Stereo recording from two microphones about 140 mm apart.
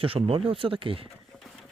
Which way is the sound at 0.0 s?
45° right (ahead or behind).